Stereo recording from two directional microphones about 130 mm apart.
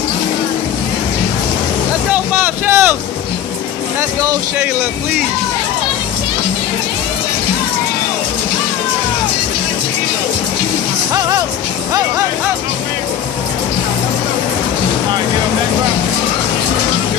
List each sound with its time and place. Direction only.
2.0 s vehicle: 15° right (ahead or behind)
4.2 s speech: 25° right (ahead or behind)
11.1 s music: 25° right (ahead or behind)